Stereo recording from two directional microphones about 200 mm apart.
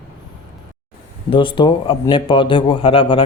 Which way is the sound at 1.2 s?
25° left (ahead or behind).